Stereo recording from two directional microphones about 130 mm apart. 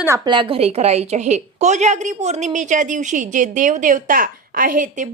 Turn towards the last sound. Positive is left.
turn(degrees=-90)